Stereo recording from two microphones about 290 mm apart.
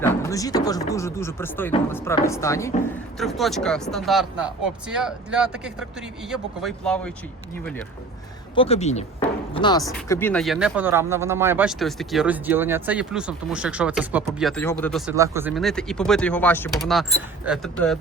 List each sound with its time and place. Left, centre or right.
0.0 s speech: centre
8.5 s speech: left; by 15.1 s centre
15.1 s speech: centre